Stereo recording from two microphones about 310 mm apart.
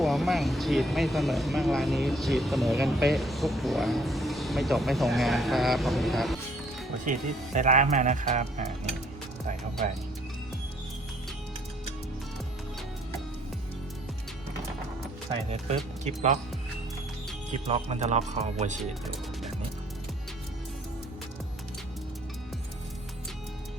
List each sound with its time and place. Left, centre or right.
0.0 s speech: centre
7.0 s speech: right
16.0 s speech: right
17.7 s speech: right